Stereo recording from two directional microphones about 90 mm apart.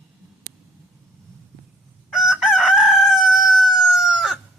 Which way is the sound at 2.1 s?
5° right (ahead or behind).